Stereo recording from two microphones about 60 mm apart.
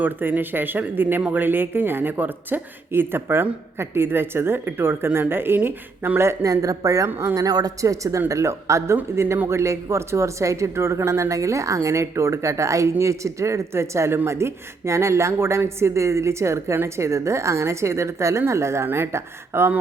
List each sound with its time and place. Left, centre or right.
0.0 s speech: right
6.1 s speech: right
7.3 s speech: right
8.3 s a woman's voice: right